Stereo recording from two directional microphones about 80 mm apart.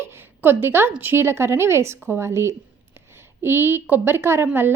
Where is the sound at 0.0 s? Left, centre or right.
Right.